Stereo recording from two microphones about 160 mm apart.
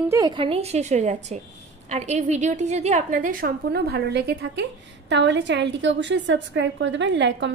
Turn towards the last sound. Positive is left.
turn(degrees=-90)